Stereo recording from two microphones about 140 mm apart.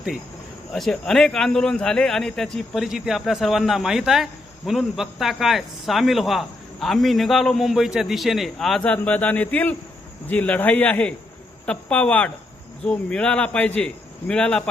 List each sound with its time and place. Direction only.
0.7 s speech: centre (ahead or behind)